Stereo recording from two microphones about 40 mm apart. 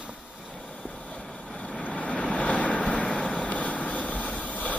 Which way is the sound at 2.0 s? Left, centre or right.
Left.